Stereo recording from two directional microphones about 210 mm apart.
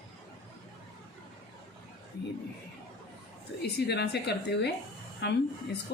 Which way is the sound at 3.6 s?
50° left (ahead or behind).